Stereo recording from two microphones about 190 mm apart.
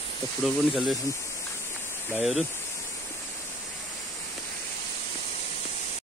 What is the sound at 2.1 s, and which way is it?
Speech, 5° right (ahead or behind).